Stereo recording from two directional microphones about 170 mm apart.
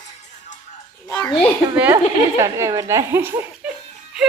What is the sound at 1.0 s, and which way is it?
Speech, 25° left (ahead or behind).